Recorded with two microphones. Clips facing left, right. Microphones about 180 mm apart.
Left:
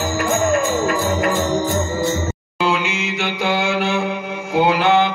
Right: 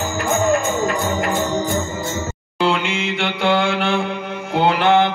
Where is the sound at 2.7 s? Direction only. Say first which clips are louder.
Even; 55° right (ahead or behind).